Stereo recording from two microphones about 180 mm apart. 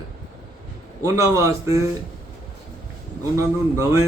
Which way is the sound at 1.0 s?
15° right (ahead or behind).